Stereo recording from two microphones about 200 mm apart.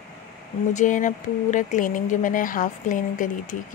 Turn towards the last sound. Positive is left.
turn(degrees=40)  # may be behind; listen again after turning